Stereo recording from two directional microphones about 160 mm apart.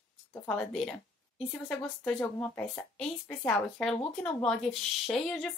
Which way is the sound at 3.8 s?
Centre (ahead or behind).